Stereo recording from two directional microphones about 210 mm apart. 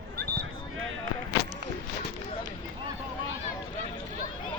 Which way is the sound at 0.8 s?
70° right (ahead or behind).